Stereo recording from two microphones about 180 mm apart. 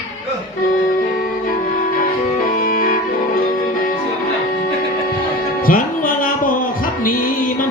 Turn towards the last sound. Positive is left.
turn(degrees=45)  # may be behind; listen again after turning